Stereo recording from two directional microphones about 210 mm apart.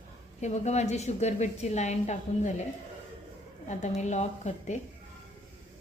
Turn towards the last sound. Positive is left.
turn(degrees=35)  # may be behind; listen again after turning